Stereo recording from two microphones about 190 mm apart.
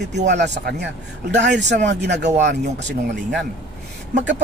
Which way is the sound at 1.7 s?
40° right (ahead or behind).